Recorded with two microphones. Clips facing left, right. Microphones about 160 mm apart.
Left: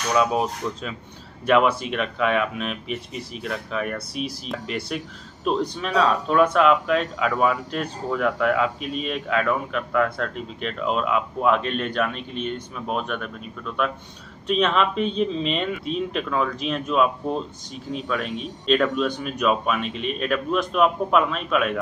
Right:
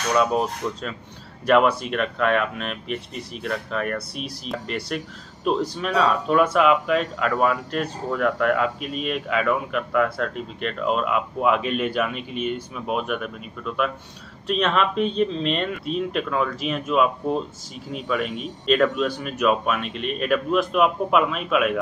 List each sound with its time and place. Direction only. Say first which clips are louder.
1.4 s speech: right 1 dB; centre (ahead or behind)